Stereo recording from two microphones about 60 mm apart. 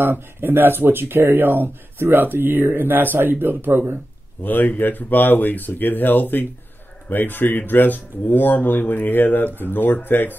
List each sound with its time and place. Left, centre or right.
0.0 s speech: right
4.4 s speech: left